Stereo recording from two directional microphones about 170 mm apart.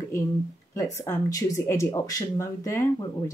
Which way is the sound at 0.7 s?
15° left (ahead or behind).